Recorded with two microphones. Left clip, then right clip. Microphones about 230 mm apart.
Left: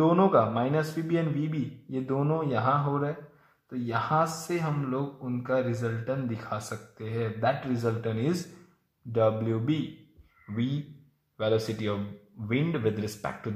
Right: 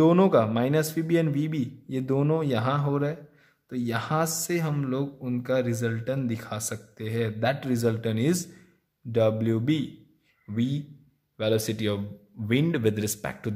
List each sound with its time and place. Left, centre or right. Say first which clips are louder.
0.0 s speech: right 2 dB; right
10.5 s speech: right 3 dB; right